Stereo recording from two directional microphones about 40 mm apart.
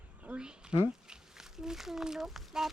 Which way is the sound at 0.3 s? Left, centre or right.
Right.